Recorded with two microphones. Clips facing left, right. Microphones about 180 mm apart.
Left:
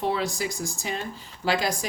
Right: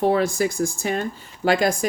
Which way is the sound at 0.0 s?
50° right (ahead or behind).